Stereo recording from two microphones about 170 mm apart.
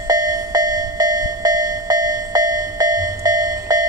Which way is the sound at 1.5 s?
20° right (ahead or behind).